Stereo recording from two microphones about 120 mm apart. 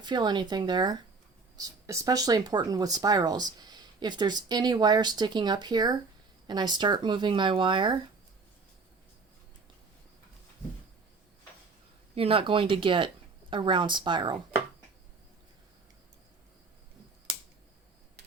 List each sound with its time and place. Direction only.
0.0 s speech: 35° right (ahead or behind)
12.1 s speech: 50° right (ahead or behind)